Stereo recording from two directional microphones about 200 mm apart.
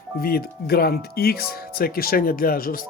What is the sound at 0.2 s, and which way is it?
Speech, 50° left (ahead or behind).